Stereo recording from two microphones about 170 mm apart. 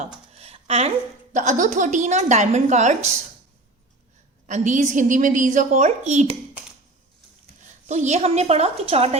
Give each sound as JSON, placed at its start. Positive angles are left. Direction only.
{"t": 0.3, "sound": "a woman's voice", "side_deg": -35}
{"t": 4.4, "sound": "a woman's voice", "side_deg": -45}
{"t": 7.6, "sound": "a woman's voice", "side_deg": -45}